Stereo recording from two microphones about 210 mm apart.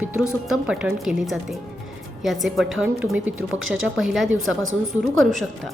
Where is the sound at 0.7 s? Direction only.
5° right (ahead or behind).